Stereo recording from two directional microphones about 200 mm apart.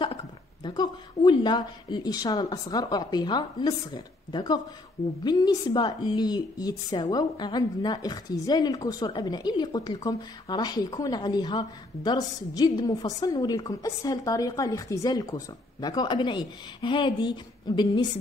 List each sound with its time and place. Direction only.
0.7 s a woman's voice: 20° left (ahead or behind)